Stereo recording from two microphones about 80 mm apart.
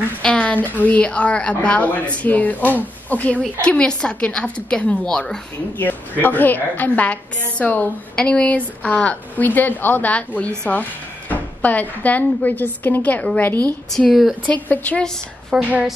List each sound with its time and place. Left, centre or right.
0.2 s a woman's voice: centre
5.8 s speech: left
13.8 s speech: centre
14.4 s speech: centre
15.5 s speech: centre